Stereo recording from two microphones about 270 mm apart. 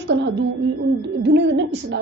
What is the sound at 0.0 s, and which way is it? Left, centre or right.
A woman's voice, right.